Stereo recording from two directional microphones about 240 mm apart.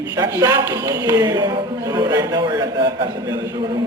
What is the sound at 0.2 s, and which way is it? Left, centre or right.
Speech, centre.